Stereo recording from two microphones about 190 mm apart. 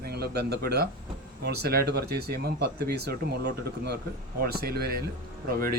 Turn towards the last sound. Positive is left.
turn(degrees=-50)  # may be behind; listen again after turning